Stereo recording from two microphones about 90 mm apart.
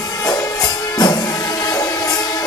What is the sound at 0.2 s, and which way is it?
Music, 45° left (ahead or behind).